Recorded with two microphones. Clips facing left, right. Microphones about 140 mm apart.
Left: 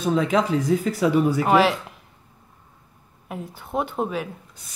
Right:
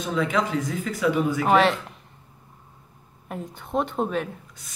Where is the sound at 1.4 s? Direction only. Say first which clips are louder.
Left 1 dB; 5° left (ahead or behind).